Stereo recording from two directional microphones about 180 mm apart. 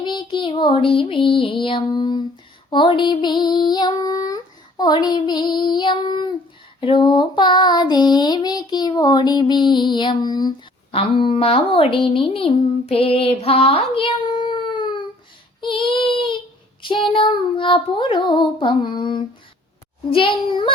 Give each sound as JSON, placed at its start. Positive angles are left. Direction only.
{"t": 0.0, "sound": "child singing", "side_deg": 25}
{"t": 10.9, "sound": "speech", "side_deg": 30}
{"t": 15.6, "sound": "child singing", "side_deg": 30}